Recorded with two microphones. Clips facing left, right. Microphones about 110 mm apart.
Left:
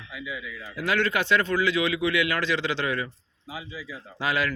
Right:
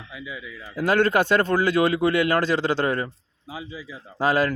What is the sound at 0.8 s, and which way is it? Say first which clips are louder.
A man's voice: right 6 dB; 45° right (ahead or behind).